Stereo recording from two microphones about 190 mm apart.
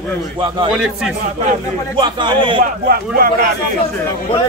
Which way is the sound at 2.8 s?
50° right (ahead or behind).